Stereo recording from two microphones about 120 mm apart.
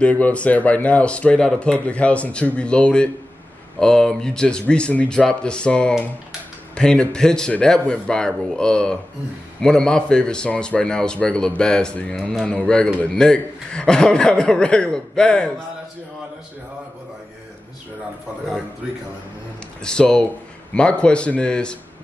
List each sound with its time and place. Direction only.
0.0 s a man's voice: 10° left (ahead or behind)
19.8 s a man's voice: 5° left (ahead or behind)